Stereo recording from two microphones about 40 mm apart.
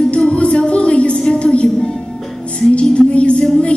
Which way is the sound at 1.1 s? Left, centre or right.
Left.